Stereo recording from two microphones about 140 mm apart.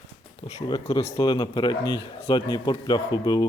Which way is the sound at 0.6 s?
30° left (ahead or behind).